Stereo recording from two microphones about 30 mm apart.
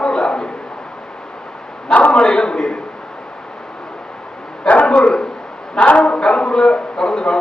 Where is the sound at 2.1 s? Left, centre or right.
Left.